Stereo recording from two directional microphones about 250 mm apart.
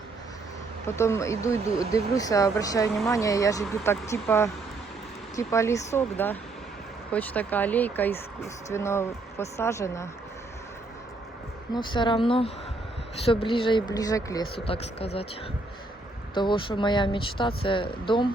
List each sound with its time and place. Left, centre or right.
0.9 s speech: centre
11.7 s speech: centre
16.3 s speech: centre